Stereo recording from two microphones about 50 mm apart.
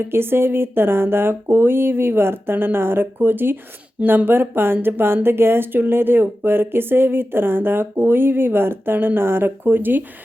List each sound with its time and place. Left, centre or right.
0.0 s speech: right